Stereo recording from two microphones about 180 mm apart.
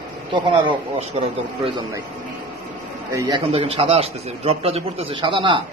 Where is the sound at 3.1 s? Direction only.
20° right (ahead or behind).